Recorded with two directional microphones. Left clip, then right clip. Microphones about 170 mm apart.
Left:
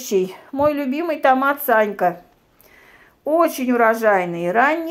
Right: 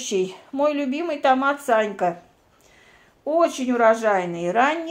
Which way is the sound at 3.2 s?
40° left (ahead or behind).